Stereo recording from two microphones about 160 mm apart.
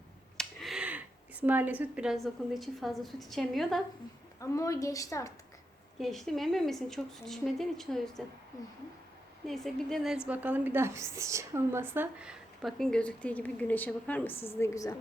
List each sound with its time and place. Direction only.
0.3 s speech: centre (ahead or behind)
4.4 s a woman's voice: 20° left (ahead or behind)
6.0 s a woman's voice: centre (ahead or behind)
9.5 s a woman's voice: centre (ahead or behind)
10.2 s a woman's voice: 10° right (ahead or behind); by 14.9 s 20° left (ahead or behind)